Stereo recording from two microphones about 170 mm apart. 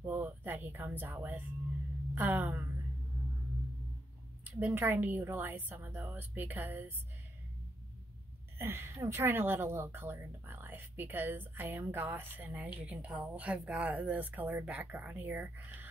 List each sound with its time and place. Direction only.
0.0 s speech: 10° right (ahead or behind)
4.5 s speech: 10° right (ahead or behind)
8.5 s speech: 15° right (ahead or behind)